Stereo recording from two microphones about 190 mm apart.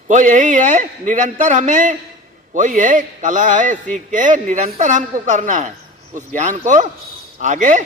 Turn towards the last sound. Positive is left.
turn(degrees=-40)  # may be behind; listen again after turning